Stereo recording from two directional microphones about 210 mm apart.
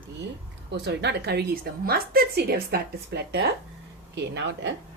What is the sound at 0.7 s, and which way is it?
A woman's voice, 55° right (ahead or behind).